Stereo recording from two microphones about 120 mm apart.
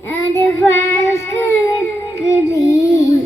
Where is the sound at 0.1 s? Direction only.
20° left (ahead or behind).